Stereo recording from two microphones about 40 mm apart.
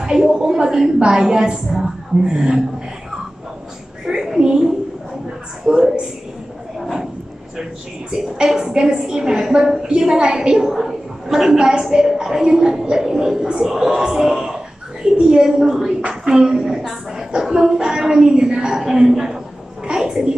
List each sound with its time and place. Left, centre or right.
0.0 s a woman's voice: centre
4.0 s a sound: centre
5.7 s a woman's voice: right
8.5 s a woman's voice: centre
18.8 s a woman's voice: centre
19.9 s a sound: centre